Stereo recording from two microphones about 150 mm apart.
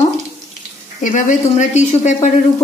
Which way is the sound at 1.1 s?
55° left (ahead or behind).